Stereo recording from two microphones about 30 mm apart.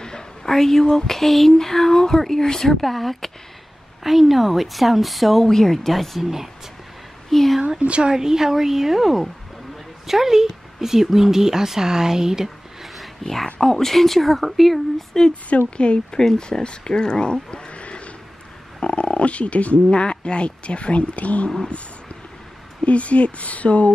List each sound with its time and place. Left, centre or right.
0.5 s a sound: centre
4.0 s a woman's voice: centre
5.5 s a sound: centre
6.2 s speech: centre
7.2 s speech: centre
7.8 s a woman's voice: right
8.1 s speech: centre
12.8 s a sound: centre
13.6 s a sound: centre
15.5 s speech: left
16.1 s a woman's voice: left
19.9 s a woman's voice: left
22.8 s a woman's voice: left